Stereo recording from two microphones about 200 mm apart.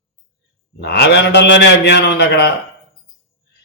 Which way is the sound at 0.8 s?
55° left (ahead or behind).